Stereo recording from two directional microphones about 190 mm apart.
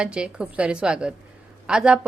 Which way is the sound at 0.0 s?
5° right (ahead or behind).